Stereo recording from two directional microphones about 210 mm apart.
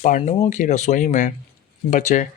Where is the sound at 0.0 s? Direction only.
35° left (ahead or behind).